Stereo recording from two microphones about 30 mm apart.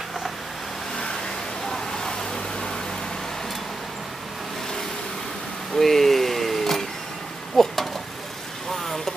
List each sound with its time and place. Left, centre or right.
1.7 s vehicle: centre
5.8 s a sound: centre
8.7 s vehicle: centre